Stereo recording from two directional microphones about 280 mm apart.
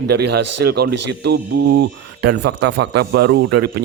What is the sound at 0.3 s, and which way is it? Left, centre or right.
Speech, right.